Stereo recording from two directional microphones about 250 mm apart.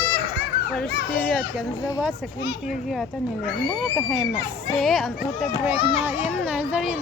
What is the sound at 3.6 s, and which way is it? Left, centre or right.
A child's voice, centre.